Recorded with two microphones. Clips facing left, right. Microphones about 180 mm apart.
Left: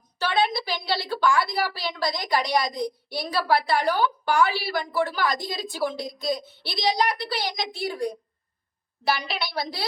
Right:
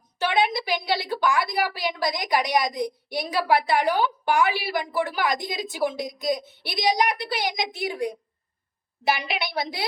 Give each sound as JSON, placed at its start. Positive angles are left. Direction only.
{"t": 0.2, "sound": "a woman's voice", "side_deg": -15}